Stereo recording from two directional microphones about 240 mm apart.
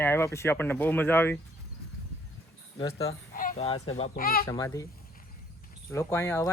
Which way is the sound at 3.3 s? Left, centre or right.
Left.